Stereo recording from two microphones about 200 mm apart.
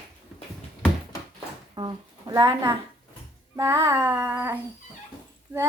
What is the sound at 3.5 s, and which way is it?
Child singing, 15° right (ahead or behind).